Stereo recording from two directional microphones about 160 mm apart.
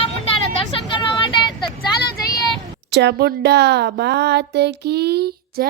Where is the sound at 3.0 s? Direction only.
90° right.